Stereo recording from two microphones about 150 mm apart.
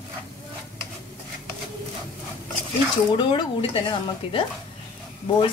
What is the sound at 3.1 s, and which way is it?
Speech, 30° left (ahead or behind).